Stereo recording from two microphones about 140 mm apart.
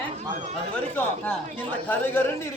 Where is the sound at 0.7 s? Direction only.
10° left (ahead or behind).